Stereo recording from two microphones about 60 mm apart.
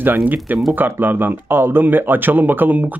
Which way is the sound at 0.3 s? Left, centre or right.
Right.